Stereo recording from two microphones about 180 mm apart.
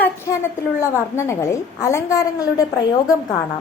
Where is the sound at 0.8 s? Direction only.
15° left (ahead or behind).